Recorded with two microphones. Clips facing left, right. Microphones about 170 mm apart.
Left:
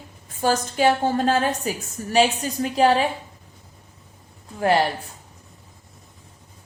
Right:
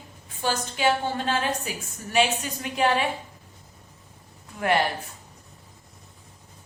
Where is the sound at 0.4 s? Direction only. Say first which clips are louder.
Left 5 dB; 40° left (ahead or behind).